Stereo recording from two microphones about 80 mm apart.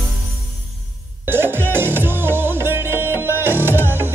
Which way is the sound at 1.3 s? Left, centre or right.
Right.